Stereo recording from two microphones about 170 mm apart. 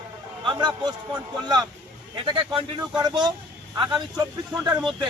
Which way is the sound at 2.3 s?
30° right (ahead or behind).